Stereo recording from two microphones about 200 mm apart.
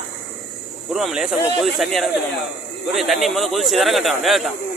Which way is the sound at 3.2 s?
Centre (ahead or behind).